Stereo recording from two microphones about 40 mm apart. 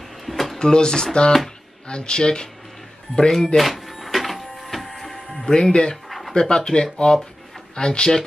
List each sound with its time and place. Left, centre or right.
0.2 s drawer open or close: centre
0.6 s speech: centre
3.2 s speech: centre
3.5 s music: centre
5.4 s speech: centre
6.0 s a sound: centre
6.3 s speech: centre